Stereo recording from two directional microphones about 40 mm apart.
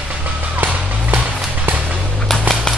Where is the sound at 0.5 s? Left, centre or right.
Right.